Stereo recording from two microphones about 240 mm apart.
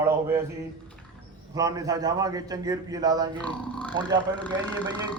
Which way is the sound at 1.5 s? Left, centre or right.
Centre.